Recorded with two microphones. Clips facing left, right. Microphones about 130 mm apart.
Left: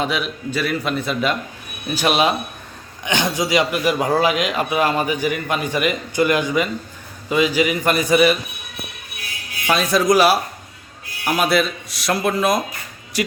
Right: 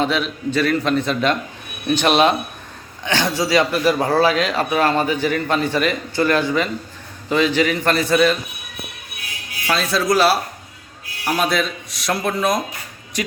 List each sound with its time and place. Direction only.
0.0 s speech: 10° left (ahead or behind)
9.6 s speech: 15° left (ahead or behind)